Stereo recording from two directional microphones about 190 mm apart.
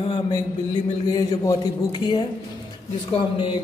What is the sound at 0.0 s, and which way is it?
Speech, 25° left (ahead or behind).